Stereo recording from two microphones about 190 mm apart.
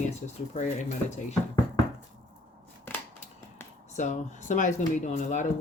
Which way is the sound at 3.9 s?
40° left (ahead or behind).